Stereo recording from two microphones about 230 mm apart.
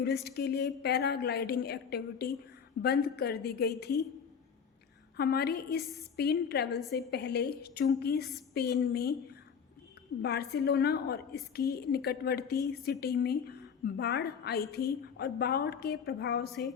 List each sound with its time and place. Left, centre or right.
0.3 s a woman's voice: left
5.1 s a woman's voice: left
10.2 s a woman's voice: left
16.5 s a sound: centre